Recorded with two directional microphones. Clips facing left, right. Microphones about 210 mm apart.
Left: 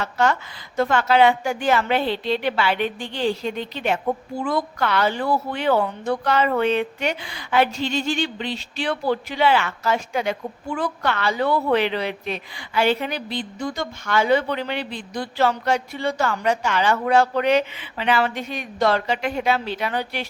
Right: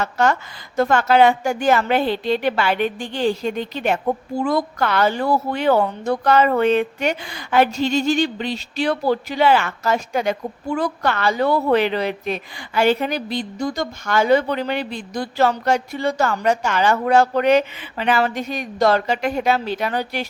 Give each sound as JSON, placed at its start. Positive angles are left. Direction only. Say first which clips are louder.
{"t": 0.0, "sound": "a woman's voice", "louder": "right 2 dB", "side_deg": -45}